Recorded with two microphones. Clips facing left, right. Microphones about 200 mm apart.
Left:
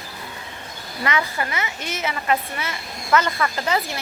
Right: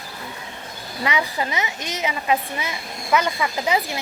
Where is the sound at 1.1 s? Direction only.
15° right (ahead or behind).